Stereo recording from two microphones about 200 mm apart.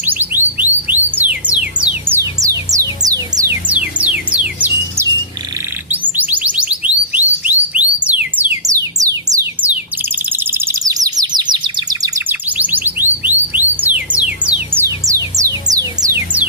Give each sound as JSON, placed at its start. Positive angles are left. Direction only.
{"t": 0.0, "sound": "music", "side_deg": -10}
{"t": 3.7, "sound": "music", "side_deg": -5}
{"t": 10.0, "sound": "bird", "side_deg": -10}
{"t": 12.5, "sound": "music", "side_deg": -10}